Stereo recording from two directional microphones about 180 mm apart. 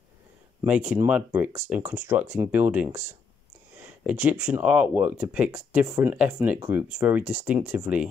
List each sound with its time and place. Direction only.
0.7 s speech: 5° right (ahead or behind)